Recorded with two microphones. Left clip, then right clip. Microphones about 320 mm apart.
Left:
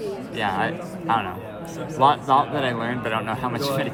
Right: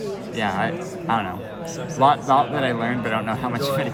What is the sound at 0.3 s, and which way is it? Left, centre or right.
Speech, centre.